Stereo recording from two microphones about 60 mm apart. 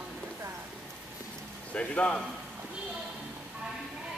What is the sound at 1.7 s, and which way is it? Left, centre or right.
Speech, left.